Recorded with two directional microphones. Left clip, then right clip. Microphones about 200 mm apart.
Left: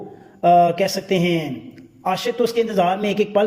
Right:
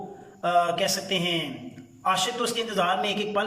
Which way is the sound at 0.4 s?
25° left (ahead or behind).